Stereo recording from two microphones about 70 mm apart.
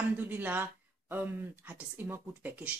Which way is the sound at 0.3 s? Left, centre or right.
Right.